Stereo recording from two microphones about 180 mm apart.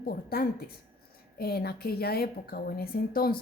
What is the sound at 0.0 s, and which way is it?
A woman's voice, 55° left (ahead or behind).